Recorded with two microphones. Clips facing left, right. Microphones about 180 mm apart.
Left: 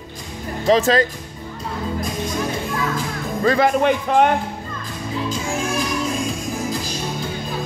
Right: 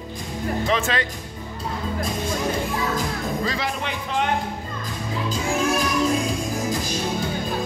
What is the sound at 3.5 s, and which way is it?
Speech, 55° left (ahead or behind).